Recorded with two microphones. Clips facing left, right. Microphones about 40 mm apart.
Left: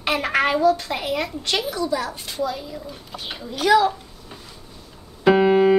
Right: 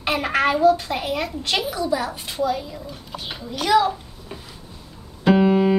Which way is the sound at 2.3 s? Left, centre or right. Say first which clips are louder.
Right 4 dB; centre.